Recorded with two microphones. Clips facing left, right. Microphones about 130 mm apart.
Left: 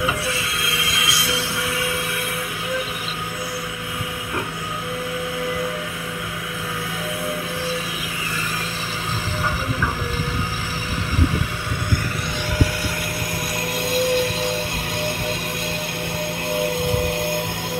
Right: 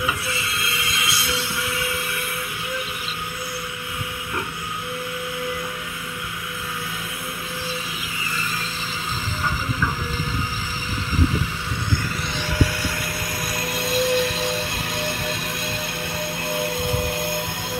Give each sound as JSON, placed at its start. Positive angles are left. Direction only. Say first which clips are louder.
{"t": 0.3, "sound": "music", "louder": "left 2 dB", "side_deg": 90}
{"t": 13.6, "sound": "music", "louder": "left 1 dB", "side_deg": 60}
{"t": 16.8, "sound": "vehicle", "louder": "left 3 dB", "side_deg": 60}